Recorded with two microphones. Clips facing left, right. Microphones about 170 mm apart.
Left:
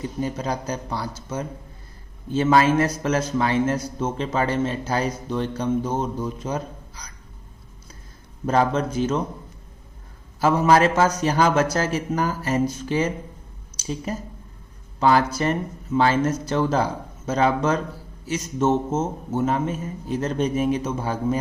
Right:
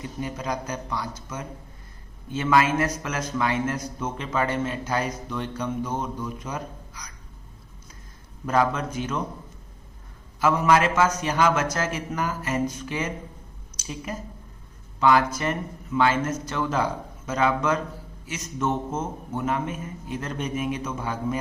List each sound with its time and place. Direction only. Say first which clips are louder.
0.0 s a man's voice: left 5 dB; 30° left (ahead or behind)
8.4 s speech: left 3 dB; 30° left (ahead or behind)
10.4 s a man's voice: left 3 dB; 30° left (ahead or behind)